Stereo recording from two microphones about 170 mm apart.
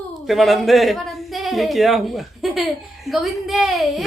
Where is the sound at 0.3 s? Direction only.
Centre (ahead or behind).